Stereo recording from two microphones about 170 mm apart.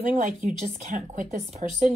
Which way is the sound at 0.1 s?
45° right (ahead or behind).